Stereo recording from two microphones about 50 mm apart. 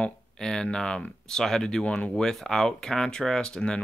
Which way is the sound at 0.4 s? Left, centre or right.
Centre.